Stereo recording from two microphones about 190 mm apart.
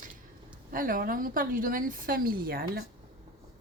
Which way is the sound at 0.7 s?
45° right (ahead or behind).